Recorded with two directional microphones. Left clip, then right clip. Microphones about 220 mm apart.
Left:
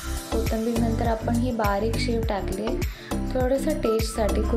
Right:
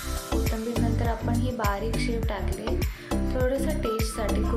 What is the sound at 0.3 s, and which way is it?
Music, centre (ahead or behind).